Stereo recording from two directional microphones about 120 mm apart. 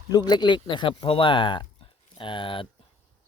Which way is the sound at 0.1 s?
35° left (ahead or behind).